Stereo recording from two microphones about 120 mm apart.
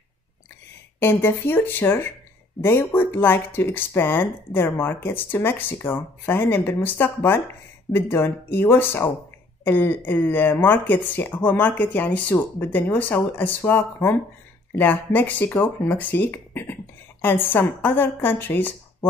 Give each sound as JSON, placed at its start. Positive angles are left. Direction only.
{"t": 0.9, "sound": "speech", "side_deg": 15}